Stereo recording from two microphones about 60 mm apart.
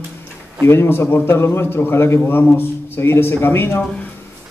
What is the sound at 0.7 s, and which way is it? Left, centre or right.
A man's voice, left.